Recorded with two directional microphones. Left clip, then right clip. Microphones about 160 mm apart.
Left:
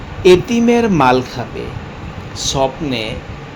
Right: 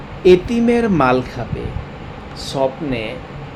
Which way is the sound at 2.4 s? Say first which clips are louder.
Left 3 dB; 30° left (ahead or behind).